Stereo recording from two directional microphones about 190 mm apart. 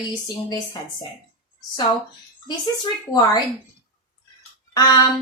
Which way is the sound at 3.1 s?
20° left (ahead or behind).